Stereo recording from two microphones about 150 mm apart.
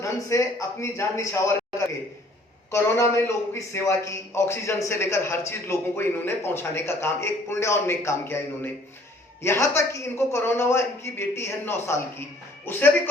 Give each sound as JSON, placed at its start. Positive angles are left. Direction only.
{"t": 0.0, "sound": "a man's voice", "side_deg": 20}
{"t": 2.7, "sound": "a man's voice", "side_deg": 20}